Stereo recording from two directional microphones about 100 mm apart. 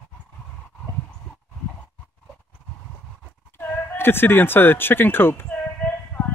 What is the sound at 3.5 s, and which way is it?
Speech, 20° left (ahead or behind).